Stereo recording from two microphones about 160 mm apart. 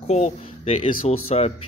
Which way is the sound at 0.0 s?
40° left (ahead or behind).